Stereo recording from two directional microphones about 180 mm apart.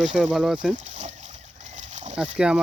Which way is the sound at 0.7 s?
40° right (ahead or behind).